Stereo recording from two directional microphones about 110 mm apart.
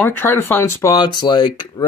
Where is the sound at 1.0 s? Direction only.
40° left (ahead or behind).